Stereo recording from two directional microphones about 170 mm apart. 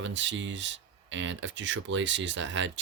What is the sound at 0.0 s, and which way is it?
Speech, 90° right.